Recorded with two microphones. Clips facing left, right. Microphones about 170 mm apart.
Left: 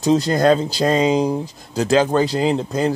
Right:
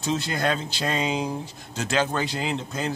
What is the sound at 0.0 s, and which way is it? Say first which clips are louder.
A man's voice: left 10 dB; 40° left (ahead or behind).